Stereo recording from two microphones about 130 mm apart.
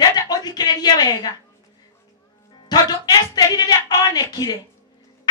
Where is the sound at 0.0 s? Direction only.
30° left (ahead or behind).